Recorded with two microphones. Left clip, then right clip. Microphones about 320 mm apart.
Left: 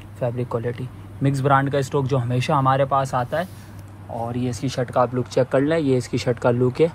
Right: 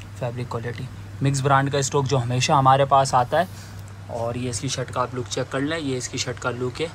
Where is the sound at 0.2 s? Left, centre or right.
Centre.